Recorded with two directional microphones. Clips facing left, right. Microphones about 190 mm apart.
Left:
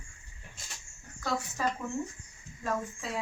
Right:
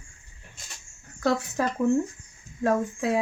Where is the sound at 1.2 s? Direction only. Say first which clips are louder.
Right 7 dB; 65° right (ahead or behind).